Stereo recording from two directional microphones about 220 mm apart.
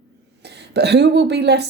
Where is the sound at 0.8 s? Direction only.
50° right (ahead or behind).